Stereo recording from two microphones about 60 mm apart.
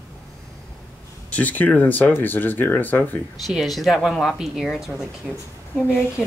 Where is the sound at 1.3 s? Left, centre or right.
Left.